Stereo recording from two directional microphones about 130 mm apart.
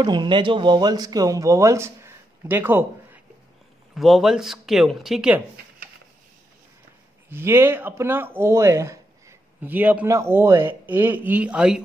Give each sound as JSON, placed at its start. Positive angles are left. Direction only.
{"t": 0.0, "sound": "speech", "side_deg": -35}
{"t": 3.9, "sound": "speech", "side_deg": 0}
{"t": 7.2, "sound": "speech", "side_deg": -15}